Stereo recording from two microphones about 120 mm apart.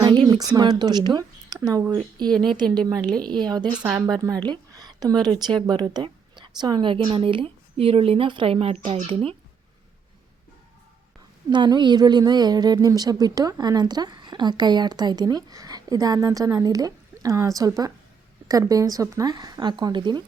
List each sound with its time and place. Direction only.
0.0 s a woman's voice: 40° right (ahead or behind)
11.4 s a woman's voice: 35° right (ahead or behind)